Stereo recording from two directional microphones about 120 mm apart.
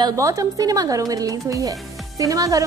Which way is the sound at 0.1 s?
25° right (ahead or behind).